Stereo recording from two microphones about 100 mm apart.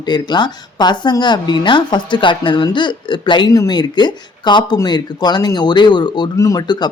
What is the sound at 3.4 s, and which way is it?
Speech, 40° left (ahead or behind).